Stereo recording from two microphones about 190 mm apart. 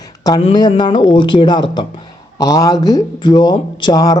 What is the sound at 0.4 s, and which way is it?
Speech, 25° left (ahead or behind).